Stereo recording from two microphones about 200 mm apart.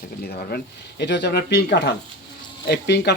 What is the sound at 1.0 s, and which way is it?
Speech, 60° left (ahead or behind).